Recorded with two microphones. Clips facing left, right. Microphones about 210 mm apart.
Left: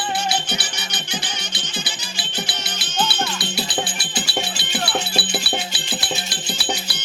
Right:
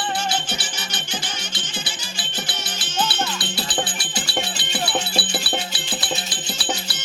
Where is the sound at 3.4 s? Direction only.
10° left (ahead or behind).